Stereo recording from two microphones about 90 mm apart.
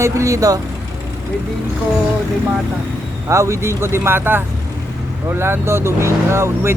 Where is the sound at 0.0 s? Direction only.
35° right (ahead or behind).